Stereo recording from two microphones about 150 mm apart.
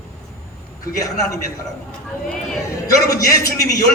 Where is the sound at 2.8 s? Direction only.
25° left (ahead or behind).